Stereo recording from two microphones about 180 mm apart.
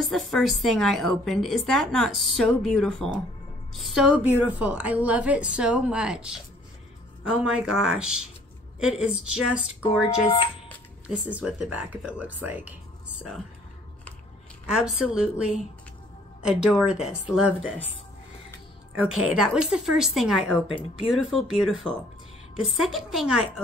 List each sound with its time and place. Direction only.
0.1 s a woman's voice: centre (ahead or behind)
9.8 s speech: 30° left (ahead or behind)
11.1 s speech: 5° right (ahead or behind)
14.7 s a woman's voice: 5° right (ahead or behind)
18.9 s a woman's voice: 5° right (ahead or behind)
22.8 s a woman's voice: centre (ahead or behind)